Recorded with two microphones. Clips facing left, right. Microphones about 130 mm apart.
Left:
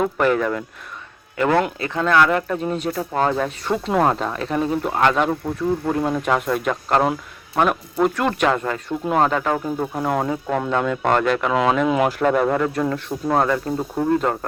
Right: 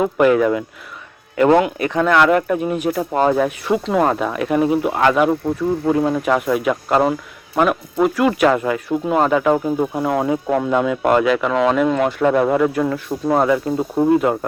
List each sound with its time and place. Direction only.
0.0 s speech: 10° right (ahead or behind); by 12.1 s 5° left (ahead or behind)
12.2 s speech: 5° right (ahead or behind)